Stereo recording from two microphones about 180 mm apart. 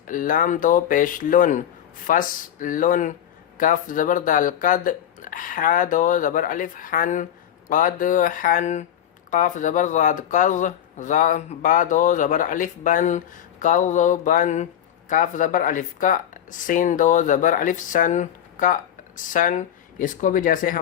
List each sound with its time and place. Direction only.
0.1 s speech: 50° left (ahead or behind)